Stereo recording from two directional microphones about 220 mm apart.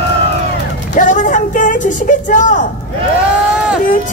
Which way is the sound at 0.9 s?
35° left (ahead or behind).